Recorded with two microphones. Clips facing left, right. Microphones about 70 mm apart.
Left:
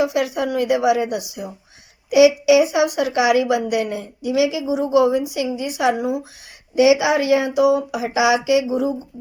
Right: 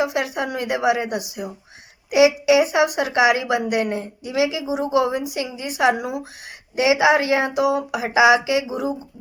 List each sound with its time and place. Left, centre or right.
0.0 s a woman's voice: right
6.0 s speech: right
6.7 s speech: right